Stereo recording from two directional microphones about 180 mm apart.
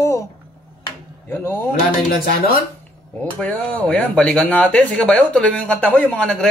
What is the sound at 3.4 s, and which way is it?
Speech, 10° left (ahead or behind).